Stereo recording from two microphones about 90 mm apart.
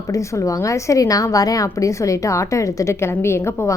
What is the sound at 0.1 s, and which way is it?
A woman's voice, 35° left (ahead or behind).